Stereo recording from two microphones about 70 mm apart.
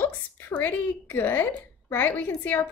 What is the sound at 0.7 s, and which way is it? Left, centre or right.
A woman's voice, left.